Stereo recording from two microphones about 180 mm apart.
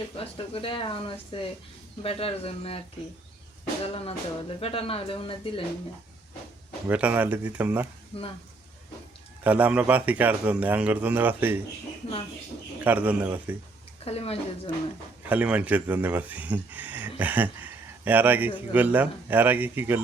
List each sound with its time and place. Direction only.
0.2 s speech: 30° left (ahead or behind)
3.8 s speech: 30° left (ahead or behind)
6.8 s speech: 10° right (ahead or behind)
9.4 s speech: 10° right (ahead or behind)
12.8 s speech: 10° right (ahead or behind)
14.0 s speech: 35° left (ahead or behind)
15.3 s speech: 10° right (ahead or behind)